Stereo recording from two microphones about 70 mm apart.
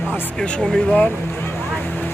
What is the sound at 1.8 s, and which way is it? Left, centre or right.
Vehicle, left.